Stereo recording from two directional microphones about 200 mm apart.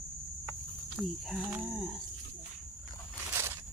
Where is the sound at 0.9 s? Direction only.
Centre (ahead or behind).